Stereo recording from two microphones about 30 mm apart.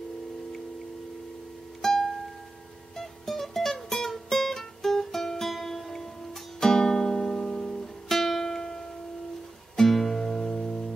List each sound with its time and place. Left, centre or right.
1.8 s music: centre
6.6 s music: left
8.1 s music: centre
9.8 s music: centre